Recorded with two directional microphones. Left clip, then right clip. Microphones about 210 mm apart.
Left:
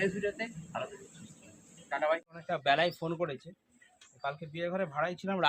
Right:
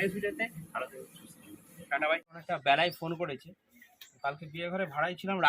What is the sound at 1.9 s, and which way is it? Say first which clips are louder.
Speech: right 1 dB; 5° left (ahead or behind).